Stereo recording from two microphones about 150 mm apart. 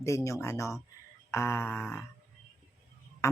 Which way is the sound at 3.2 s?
20° left (ahead or behind).